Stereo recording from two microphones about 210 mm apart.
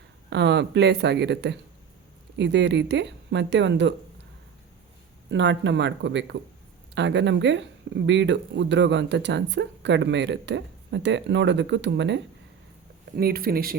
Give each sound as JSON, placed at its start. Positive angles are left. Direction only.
{"t": 0.3, "sound": "speech", "side_deg": -55}
{"t": 5.3, "sound": "speech", "side_deg": -60}
{"t": 13.1, "sound": "speech", "side_deg": -45}